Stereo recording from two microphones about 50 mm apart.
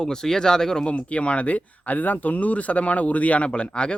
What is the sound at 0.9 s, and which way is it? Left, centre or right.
Speech, left.